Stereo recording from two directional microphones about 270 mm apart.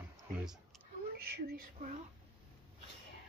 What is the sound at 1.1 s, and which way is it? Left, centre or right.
Speech, right.